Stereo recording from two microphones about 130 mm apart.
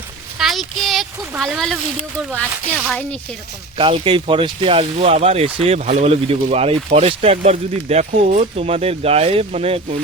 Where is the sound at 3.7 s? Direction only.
40° right (ahead or behind).